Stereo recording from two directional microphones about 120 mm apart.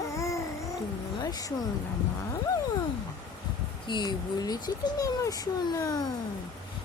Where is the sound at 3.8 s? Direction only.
40° left (ahead or behind).